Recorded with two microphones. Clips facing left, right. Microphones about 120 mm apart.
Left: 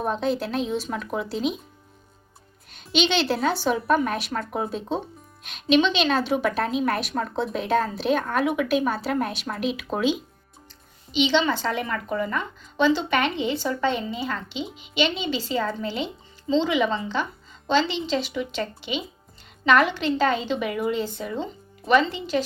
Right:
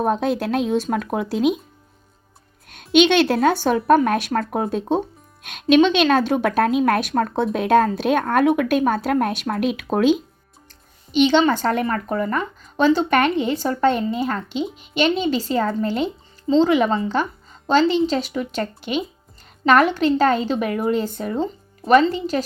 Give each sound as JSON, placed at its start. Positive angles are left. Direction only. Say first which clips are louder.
{"t": 0.0, "sound": "a woman's voice", "louder": "right 5 dB", "side_deg": -55}
{"t": 2.9, "sound": "a woman's voice", "louder": "right 8 dB", "side_deg": -55}